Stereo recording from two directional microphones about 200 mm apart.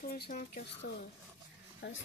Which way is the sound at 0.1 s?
45° left (ahead or behind).